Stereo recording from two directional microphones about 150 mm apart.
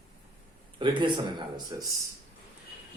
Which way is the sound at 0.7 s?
35° right (ahead or behind).